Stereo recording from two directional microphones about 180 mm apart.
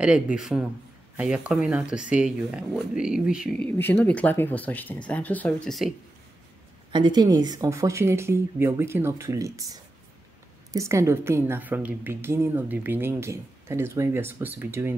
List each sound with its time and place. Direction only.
0.0 s speech: 5° right (ahead or behind)
3.7 s speech: 10° left (ahead or behind)
6.9 s a woman's voice: 25° right (ahead or behind)